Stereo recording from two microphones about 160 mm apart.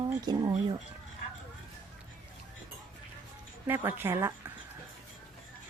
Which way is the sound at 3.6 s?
15° right (ahead or behind).